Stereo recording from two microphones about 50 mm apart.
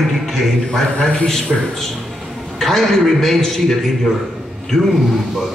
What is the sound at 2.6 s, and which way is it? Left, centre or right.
A man's voice, centre.